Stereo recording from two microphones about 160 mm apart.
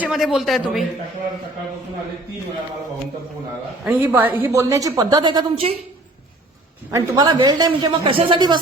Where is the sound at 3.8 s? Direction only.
10° right (ahead or behind); by 5.7 s 30° right (ahead or behind).